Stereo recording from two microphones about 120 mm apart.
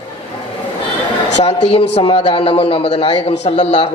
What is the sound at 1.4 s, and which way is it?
A man's voice, 60° left (ahead or behind).